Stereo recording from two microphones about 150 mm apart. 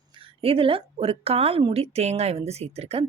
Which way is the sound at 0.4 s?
40° right (ahead or behind).